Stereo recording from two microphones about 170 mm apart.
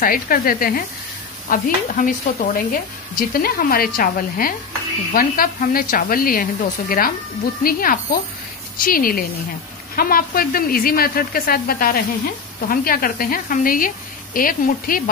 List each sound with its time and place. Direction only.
0.0 s speech: 55° left (ahead or behind)